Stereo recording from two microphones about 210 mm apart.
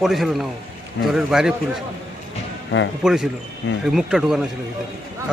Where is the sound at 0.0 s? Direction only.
Centre (ahead or behind).